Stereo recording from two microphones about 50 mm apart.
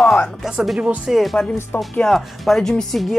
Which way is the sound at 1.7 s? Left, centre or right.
Left.